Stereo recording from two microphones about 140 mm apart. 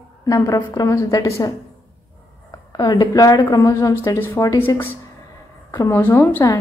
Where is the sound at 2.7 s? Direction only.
30° left (ahead or behind).